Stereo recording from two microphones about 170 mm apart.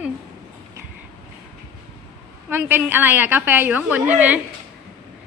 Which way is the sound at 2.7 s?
10° right (ahead or behind).